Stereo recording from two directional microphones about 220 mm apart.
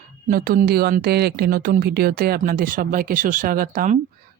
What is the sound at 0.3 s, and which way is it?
Speech, 40° right (ahead or behind).